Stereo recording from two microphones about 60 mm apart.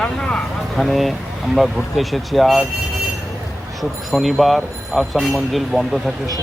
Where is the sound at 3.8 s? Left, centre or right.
Centre.